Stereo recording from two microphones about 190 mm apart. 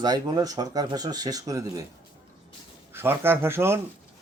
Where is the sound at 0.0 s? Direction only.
20° right (ahead or behind).